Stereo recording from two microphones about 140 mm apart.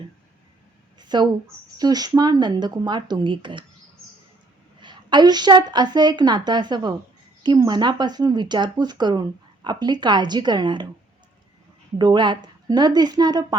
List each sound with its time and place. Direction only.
0.9 s speech: 30° right (ahead or behind)
4.8 s speech: 35° right (ahead or behind)
11.9 s speech: 30° right (ahead or behind)